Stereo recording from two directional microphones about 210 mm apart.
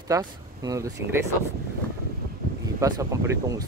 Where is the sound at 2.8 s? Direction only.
15° right (ahead or behind).